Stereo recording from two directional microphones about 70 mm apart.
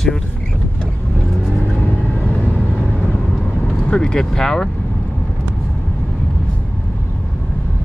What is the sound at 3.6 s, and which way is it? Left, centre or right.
Speech, centre.